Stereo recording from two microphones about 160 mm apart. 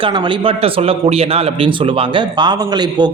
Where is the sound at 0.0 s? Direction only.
30° right (ahead or behind).